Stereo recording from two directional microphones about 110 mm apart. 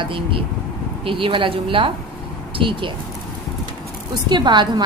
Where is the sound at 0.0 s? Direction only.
50° right (ahead or behind).